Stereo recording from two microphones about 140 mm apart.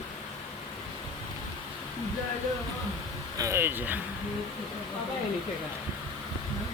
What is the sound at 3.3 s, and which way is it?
Speech, 20° right (ahead or behind).